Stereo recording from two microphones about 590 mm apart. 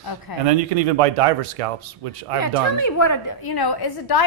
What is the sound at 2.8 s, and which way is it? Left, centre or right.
A woman's voice, left.